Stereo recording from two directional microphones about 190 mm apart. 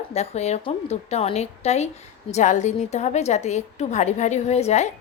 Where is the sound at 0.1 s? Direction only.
35° left (ahead or behind).